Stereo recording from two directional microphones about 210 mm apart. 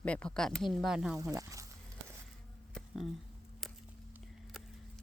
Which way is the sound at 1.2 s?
15° right (ahead or behind).